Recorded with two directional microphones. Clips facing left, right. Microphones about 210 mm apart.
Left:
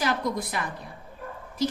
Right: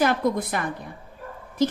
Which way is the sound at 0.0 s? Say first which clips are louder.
Right 5 dB; 55° right (ahead or behind).